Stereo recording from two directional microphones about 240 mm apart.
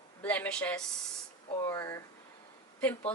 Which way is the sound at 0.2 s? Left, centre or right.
Centre.